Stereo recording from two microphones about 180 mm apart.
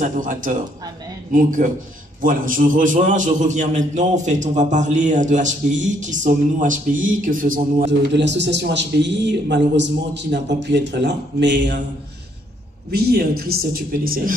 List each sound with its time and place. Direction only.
0.0 s a man's voice: 45° right (ahead or behind)
8.1 s speech: 75° right (ahead or behind)
12.9 s speech: 60° right (ahead or behind)